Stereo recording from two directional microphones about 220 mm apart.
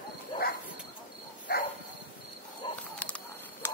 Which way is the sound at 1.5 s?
45° left (ahead or behind).